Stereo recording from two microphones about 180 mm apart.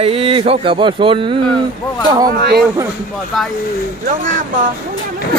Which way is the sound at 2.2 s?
60° right (ahead or behind).